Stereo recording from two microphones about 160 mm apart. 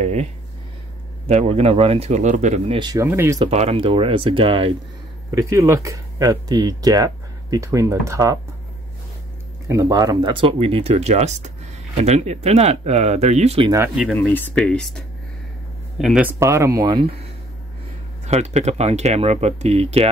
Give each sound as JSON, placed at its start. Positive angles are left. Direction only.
{"t": 0.0, "sound": "a sound", "side_deg": -45}
{"t": 1.2, "sound": "speech", "side_deg": -40}
{"t": 2.8, "sound": "speech", "side_deg": -25}
{"t": 3.4, "sound": "speech", "side_deg": -40}
{"t": 5.3, "sound": "speech", "side_deg": -20}
{"t": 9.7, "sound": "speech", "side_deg": -20}
{"t": 14.1, "sound": "speech", "side_deg": 10}
{"t": 16.3, "sound": "speech", "side_deg": -15}
{"t": 16.8, "sound": "speech", "side_deg": -35}
{"t": 18.2, "sound": "speech", "side_deg": -45}